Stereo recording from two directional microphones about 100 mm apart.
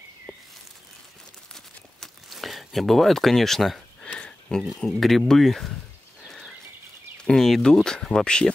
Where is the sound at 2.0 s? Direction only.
Centre (ahead or behind).